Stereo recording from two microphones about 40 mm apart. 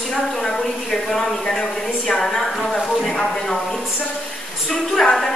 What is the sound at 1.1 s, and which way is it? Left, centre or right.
Speech, centre.